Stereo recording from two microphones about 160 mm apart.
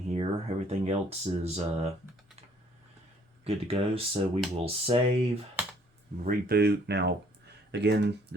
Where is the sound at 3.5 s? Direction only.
40° right (ahead or behind).